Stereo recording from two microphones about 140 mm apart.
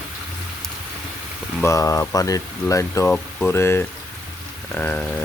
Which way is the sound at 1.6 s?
25° left (ahead or behind).